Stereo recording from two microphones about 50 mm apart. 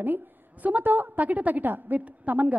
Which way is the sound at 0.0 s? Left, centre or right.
Right.